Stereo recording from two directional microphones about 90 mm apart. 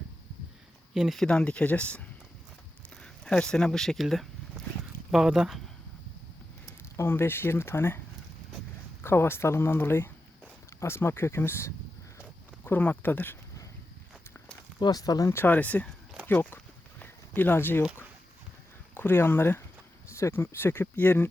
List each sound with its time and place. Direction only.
0.9 s speech: centre (ahead or behind)
2.9 s a sound: 10° left (ahead or behind)
5.1 s speech: 5° right (ahead or behind)
6.9 s speech: 25° left (ahead or behind)
9.0 s speech: 25° left (ahead or behind)
14.3 s walk: 15° left (ahead or behind)
14.8 s speech: 45° left (ahead or behind)
15.4 s speech: 20° left (ahead or behind)
17.0 s a sound: 20° left (ahead or behind)
18.9 s speech: 25° left (ahead or behind)